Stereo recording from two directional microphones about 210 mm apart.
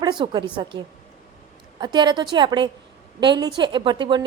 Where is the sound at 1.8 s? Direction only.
20° right (ahead or behind).